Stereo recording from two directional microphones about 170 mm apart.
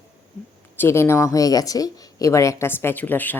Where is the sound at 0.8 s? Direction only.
15° left (ahead or behind).